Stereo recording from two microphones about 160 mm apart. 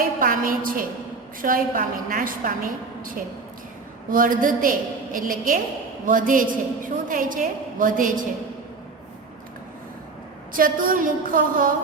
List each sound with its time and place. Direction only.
0.2 s a woman's voice: 60° right (ahead or behind)
10.5 s a woman's voice: 60° right (ahead or behind)